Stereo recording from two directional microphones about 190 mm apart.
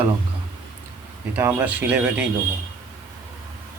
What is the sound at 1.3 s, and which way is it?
Speech, 10° right (ahead or behind).